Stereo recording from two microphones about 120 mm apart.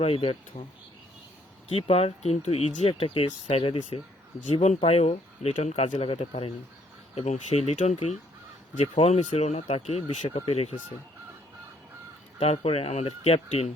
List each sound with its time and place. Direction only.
0.0 s speech: 55° left (ahead or behind)
1.7 s speech: 55° left (ahead or behind)
7.2 s speech: 65° left (ahead or behind)
12.4 s speech: 55° left (ahead or behind)